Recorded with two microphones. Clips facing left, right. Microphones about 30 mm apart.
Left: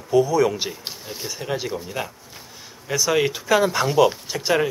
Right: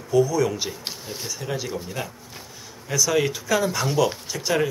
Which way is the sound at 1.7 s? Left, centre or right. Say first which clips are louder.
Left 2 dB; centre.